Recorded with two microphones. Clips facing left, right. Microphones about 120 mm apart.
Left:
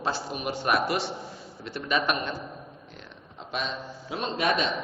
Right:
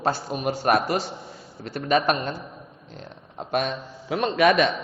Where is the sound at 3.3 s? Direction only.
55° right (ahead or behind); by 4.7 s 70° right (ahead or behind).